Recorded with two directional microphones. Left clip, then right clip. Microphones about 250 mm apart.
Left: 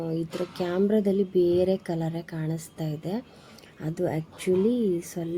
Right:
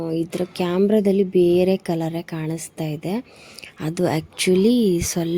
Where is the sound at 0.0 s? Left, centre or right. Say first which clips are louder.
Right 6 dB; right.